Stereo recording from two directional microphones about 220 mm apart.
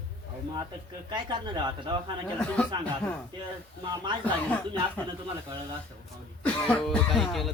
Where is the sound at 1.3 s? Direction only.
20° right (ahead or behind).